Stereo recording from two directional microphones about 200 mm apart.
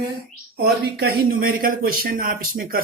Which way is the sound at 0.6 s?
50° right (ahead or behind).